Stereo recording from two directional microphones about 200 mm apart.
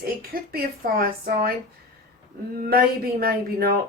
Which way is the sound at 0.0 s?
45° right (ahead or behind).